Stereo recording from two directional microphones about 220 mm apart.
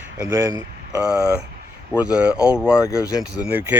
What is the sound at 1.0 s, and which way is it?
Speech, 5° right (ahead or behind).